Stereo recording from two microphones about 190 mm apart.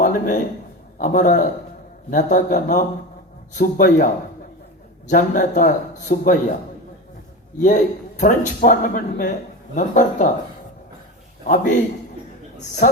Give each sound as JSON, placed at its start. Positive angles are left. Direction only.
{"t": 0.0, "sound": "a sound", "side_deg": 40}
{"t": 0.9, "sound": "a man's voice", "side_deg": 45}
{"t": 7.6, "sound": "a man's voice", "side_deg": 40}
{"t": 11.4, "sound": "speech", "side_deg": 40}
{"t": 12.8, "sound": "speech", "side_deg": 45}